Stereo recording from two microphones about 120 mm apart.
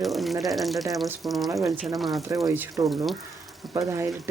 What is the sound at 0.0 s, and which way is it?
Water, centre (ahead or behind).